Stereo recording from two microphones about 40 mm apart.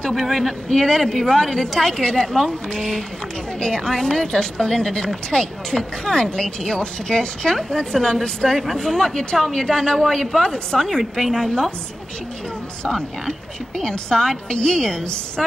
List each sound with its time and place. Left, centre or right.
0.1 s speech: centre
13.7 s a woman's voice: centre